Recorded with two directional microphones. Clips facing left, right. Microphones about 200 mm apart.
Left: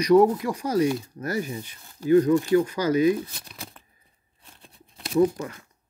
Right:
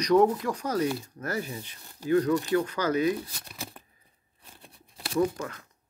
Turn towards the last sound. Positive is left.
turn(degrees=15)  # may be behind; listen again after turning